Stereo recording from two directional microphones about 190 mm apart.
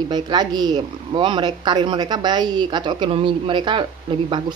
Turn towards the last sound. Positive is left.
turn(degrees=-25)  # may be behind; listen again after turning